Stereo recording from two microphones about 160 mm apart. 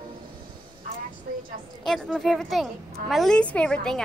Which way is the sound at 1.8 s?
Centre (ahead or behind).